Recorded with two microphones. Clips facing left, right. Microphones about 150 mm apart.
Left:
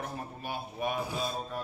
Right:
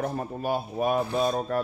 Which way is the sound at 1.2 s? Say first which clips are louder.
Right 10 dB; 65° right (ahead or behind).